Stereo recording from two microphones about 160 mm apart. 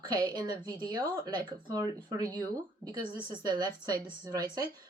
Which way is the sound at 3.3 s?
25° right (ahead or behind).